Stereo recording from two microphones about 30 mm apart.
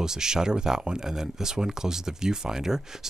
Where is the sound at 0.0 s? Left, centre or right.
Right.